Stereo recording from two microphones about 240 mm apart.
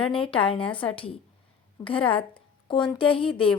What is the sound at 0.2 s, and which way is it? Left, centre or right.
A woman's voice, left.